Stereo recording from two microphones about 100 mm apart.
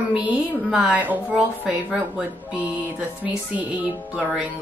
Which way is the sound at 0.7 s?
10° right (ahead or behind).